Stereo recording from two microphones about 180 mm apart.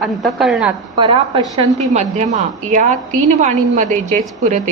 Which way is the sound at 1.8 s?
40° right (ahead or behind).